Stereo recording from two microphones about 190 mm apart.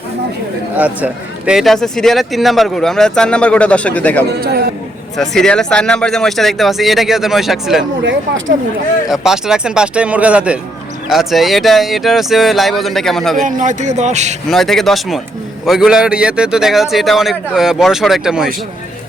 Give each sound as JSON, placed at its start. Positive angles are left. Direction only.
{"t": 0.8, "sound": "speech", "side_deg": -10}
{"t": 4.3, "sound": "a man's voice", "side_deg": -60}
{"t": 5.1, "sound": "speech", "side_deg": 0}
{"t": 9.0, "sound": "speech", "side_deg": 0}
{"t": 13.4, "sound": "a man's voice", "side_deg": -40}
{"t": 14.5, "sound": "speech", "side_deg": 0}